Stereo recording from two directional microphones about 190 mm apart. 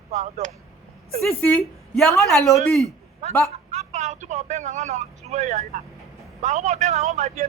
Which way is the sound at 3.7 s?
35° right (ahead or behind).